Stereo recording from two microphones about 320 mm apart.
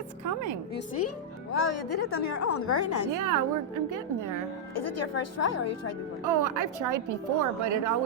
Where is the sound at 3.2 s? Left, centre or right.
Right.